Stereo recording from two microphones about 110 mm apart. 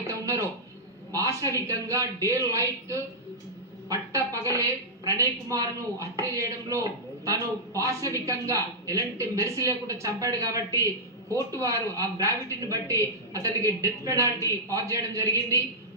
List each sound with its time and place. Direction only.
1.1 s a woman's voice: 30° right (ahead or behind)